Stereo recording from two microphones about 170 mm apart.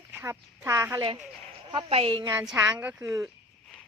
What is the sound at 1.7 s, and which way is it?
Speech, 30° right (ahead or behind).